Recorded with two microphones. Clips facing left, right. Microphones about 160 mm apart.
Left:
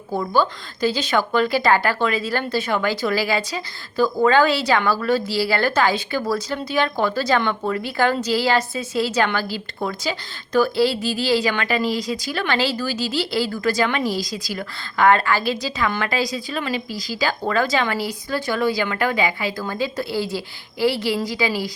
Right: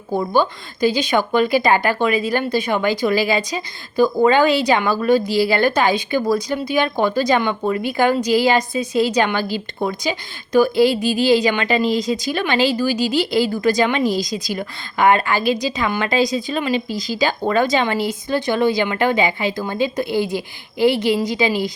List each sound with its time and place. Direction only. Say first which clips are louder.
0.1 s speech: right 2 dB; 15° right (ahead or behind)